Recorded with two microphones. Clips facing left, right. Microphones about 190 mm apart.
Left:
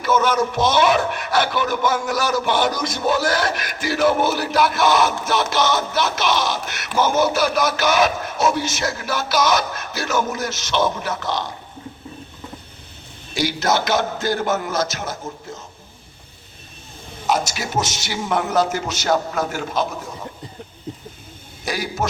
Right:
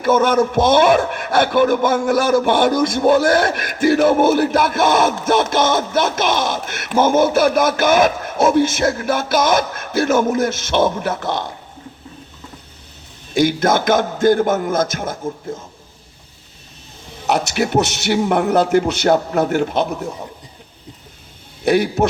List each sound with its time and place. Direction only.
0.0 s speech: 55° right (ahead or behind)
13.3 s speech: 50° right (ahead or behind)
17.2 s a man's voice: 65° right (ahead or behind)
21.6 s a man's voice: 60° right (ahead or behind)